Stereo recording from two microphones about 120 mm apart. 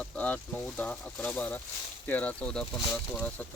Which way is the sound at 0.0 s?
10° left (ahead or behind).